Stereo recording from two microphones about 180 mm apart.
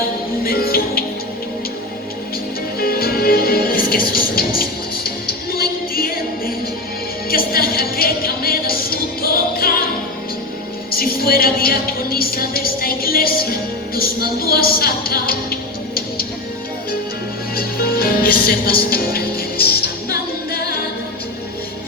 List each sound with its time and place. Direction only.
0.4 s music: 55° left (ahead or behind)
2.7 s music: 55° left (ahead or behind)
10.9 s a sound: 55° left (ahead or behind)
17.5 s music: 55° left (ahead or behind)